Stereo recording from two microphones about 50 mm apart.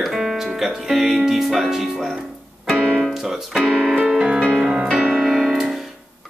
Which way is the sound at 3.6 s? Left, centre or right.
Centre.